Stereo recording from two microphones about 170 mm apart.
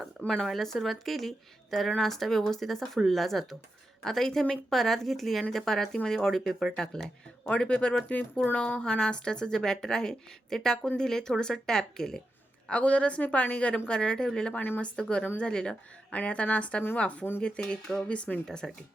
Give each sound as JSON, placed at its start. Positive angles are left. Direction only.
{"t": 0.2, "sound": "a woman's voice", "side_deg": 5}